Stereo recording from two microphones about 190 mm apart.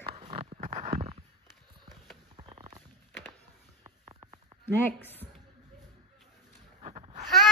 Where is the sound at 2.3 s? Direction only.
30° right (ahead or behind).